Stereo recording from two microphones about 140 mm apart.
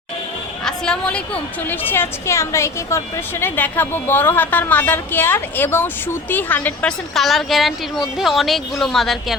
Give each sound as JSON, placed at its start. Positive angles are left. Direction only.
{"t": 0.6, "sound": "a woman's voice", "side_deg": 5}